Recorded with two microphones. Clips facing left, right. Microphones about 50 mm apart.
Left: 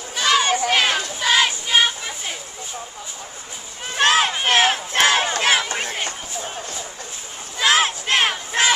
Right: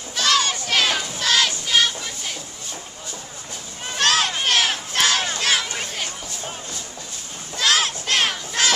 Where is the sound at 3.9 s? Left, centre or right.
Centre.